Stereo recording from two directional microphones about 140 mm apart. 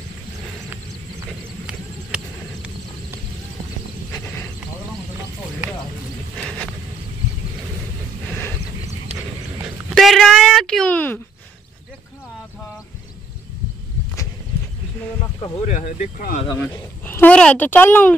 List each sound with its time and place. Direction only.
1.7 s horse: 5° right (ahead or behind)
9.9 s a sound: centre (ahead or behind)
15.6 s speech: 60° left (ahead or behind)
16.5 s speech: 15° left (ahead or behind)